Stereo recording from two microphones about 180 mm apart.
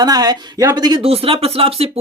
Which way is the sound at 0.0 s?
20° right (ahead or behind).